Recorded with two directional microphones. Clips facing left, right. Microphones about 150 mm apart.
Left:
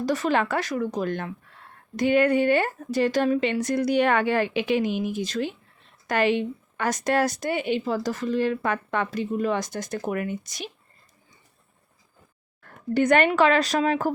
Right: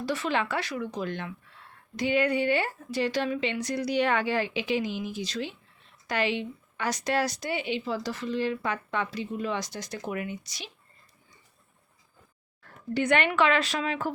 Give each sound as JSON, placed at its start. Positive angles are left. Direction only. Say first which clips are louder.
{"t": 0.0, "sound": "speech", "louder": "left 5 dB", "side_deg": 45}
{"t": 12.6, "sound": "speech", "louder": "left 6 dB", "side_deg": 45}